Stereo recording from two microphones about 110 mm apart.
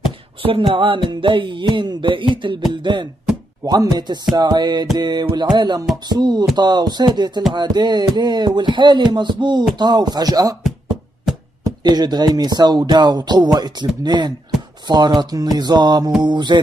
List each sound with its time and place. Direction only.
0.4 s music: 50° right (ahead or behind)
3.6 s speech: 35° right (ahead or behind)
7.5 s music: 40° right (ahead or behind)
9.8 s speech: 40° right (ahead or behind)
11.6 s speech: 40° right (ahead or behind)
16.2 s music: 40° right (ahead or behind)